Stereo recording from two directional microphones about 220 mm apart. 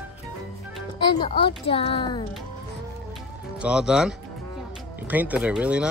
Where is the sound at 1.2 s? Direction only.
25° left (ahead or behind).